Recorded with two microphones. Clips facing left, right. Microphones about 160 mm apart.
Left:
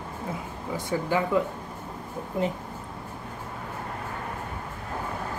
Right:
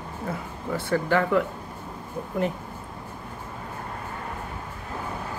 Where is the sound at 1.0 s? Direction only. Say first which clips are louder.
Right 2 dB; 70° right (ahead or behind).